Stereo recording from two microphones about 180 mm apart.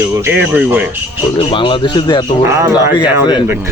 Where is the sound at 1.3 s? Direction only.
30° left (ahead or behind).